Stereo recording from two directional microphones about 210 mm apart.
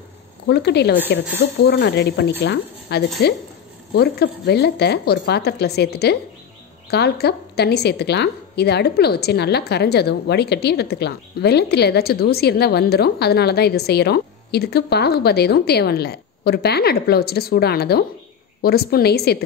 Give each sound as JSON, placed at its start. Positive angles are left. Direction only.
{"t": 0.5, "sound": "a woman's voice", "side_deg": 50}